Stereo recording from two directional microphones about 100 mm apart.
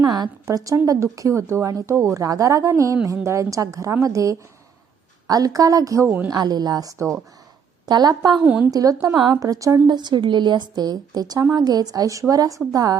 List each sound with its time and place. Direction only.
0.0 s a woman's voice: 45° right (ahead or behind)
8.4 s a woman's voice: 15° right (ahead or behind)
8.7 s a woman's voice: 35° right (ahead or behind)